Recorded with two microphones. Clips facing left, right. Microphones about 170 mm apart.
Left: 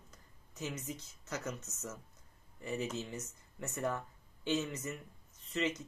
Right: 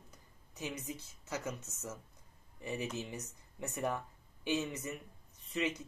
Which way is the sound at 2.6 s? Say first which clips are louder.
Left 1 dB; 15° right (ahead or behind).